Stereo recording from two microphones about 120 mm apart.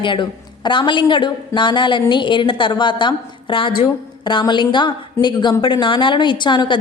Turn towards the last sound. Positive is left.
turn(degrees=40)  # may be behind; listen again after turning